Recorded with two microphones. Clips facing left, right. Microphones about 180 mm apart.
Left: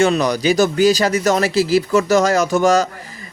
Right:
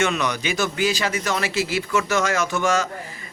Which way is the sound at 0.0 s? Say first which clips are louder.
Left 7 dB; 35° left (ahead or behind).